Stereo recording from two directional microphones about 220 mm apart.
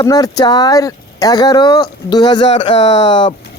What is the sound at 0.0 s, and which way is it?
Speech, 15° left (ahead or behind).